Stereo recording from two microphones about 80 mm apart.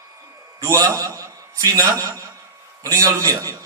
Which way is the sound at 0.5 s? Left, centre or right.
Right.